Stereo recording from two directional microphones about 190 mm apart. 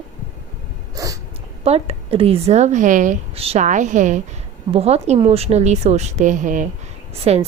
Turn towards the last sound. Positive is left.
turn(degrees=-35)  # may be behind; listen again after turning